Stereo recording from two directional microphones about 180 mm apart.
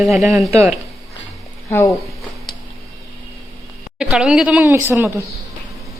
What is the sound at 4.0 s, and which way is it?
A woman's voice, 5° right (ahead or behind).